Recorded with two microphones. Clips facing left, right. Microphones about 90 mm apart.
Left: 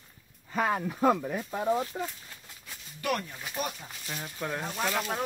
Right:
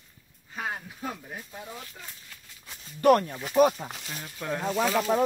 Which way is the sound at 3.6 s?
90° right.